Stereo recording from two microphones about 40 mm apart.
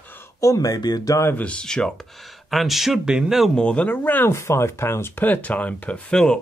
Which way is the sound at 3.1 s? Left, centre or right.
Centre.